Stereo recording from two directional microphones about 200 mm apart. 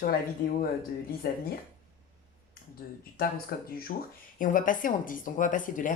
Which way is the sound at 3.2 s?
50° left (ahead or behind).